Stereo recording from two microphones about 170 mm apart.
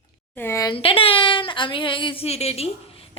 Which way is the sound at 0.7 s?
30° left (ahead or behind).